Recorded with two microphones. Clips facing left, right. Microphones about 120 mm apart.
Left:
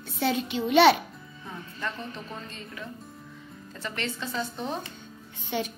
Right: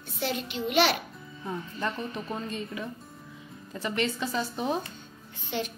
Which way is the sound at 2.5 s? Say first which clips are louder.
Right 5 dB; 15° right (ahead or behind).